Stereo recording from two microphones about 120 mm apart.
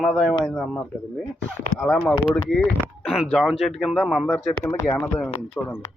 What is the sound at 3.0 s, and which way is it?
Speech, centre (ahead or behind).